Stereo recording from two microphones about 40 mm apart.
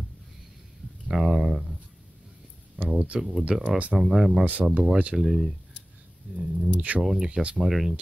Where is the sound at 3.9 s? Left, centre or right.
Centre.